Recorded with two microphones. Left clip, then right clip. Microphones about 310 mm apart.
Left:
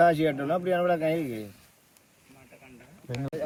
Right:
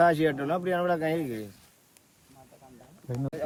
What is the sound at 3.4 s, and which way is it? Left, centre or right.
Speech, centre.